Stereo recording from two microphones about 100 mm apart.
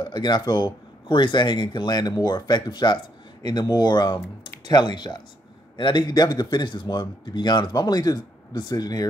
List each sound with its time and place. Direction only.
0.0 s speech: 45° left (ahead or behind)